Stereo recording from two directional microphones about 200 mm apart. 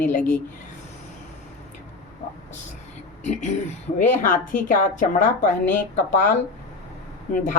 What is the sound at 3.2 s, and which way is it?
Speech, 35° left (ahead or behind).